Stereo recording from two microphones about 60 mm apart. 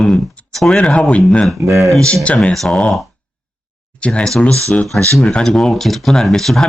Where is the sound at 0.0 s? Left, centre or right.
Centre.